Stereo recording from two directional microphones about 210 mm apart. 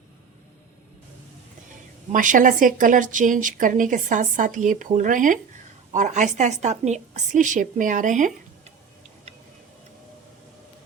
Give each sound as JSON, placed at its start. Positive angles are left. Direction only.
{"t": 2.1, "sound": "a woman's voice", "side_deg": -40}